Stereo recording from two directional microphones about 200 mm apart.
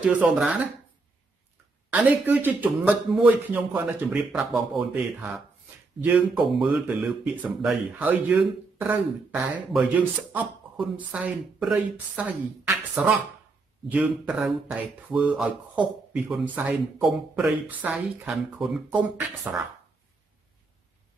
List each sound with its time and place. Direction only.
0.0 s speech: 5° right (ahead or behind)
1.9 s speech: 10° right (ahead or behind)